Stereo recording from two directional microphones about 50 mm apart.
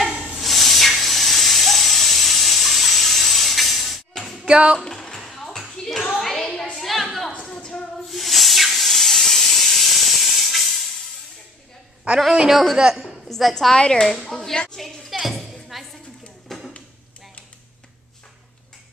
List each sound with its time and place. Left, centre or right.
0.3 s hiss: centre
4.5 s speech: centre
4.7 s music: centre
5.6 s clapping: centre
6.8 s a sound: centre
7.3 s a sound: centre
8.1 s hiss: centre
12.4 s a man's voice: centre
12.7 s a woman's voice: centre
13.0 s a woman's voice: centre
13.7 s speech: centre
14.0 s a sound: centre
15.0 s music: centre
16.4 s a sound: centre